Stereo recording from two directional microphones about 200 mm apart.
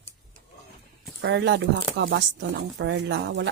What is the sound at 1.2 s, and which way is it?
Speech, 60° right (ahead or behind).